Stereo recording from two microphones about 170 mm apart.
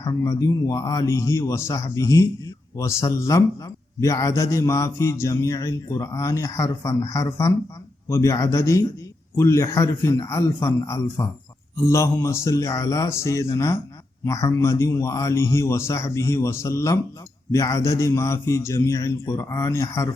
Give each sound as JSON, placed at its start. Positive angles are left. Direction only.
{"t": 0.0, "sound": "a man's voice", "side_deg": 20}